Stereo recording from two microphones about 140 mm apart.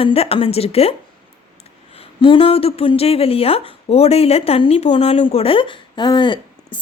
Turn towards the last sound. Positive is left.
turn(degrees=35)  # may be behind; listen again after turning